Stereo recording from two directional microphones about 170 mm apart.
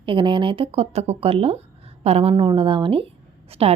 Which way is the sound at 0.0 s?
30° right (ahead or behind).